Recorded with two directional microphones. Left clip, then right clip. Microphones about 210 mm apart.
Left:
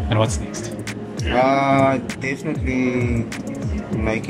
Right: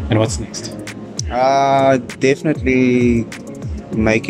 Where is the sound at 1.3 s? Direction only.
50° right (ahead or behind).